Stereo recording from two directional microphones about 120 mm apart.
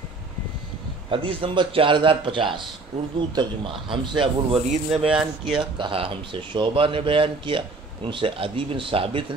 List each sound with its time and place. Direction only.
1.1 s speech: 45° right (ahead or behind)
4.6 s speech: 60° right (ahead or behind)
5.6 s speech: 45° right (ahead or behind)